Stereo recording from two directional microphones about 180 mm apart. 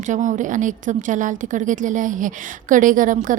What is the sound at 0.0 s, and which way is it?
A woman's voice, 45° right (ahead or behind).